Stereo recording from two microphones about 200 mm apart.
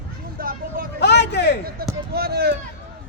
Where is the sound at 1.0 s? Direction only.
60° left (ahead or behind).